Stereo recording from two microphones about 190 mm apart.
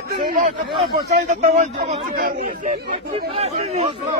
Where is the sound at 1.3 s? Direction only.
40° right (ahead or behind).